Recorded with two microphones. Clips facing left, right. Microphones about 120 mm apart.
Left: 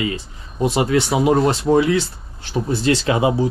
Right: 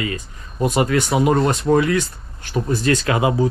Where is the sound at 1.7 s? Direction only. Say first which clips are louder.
Left 1 dB; 25° left (ahead or behind).